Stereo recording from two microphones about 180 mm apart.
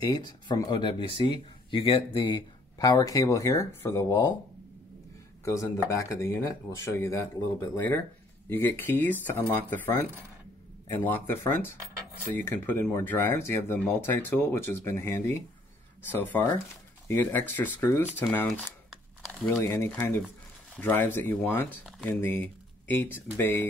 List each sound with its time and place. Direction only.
0.0 s speech: 20° left (ahead or behind)
5.4 s speech: 15° left (ahead or behind)
11.1 s speech: 10° left (ahead or behind)
18.9 s crumpling: centre (ahead or behind)
19.4 s speech: 20° left (ahead or behind)
21.8 s a sound: centre (ahead or behind)
22.2 s speech: 10° left (ahead or behind)